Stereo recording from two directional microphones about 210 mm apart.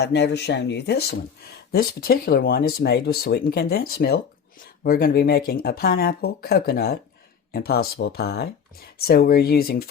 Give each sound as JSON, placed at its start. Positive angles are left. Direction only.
{"t": 0.0, "sound": "speech", "side_deg": 55}